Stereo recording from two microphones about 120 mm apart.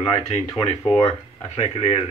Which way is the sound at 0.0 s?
55° left (ahead or behind).